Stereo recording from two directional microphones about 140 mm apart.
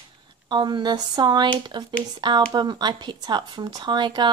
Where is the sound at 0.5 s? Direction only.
30° right (ahead or behind).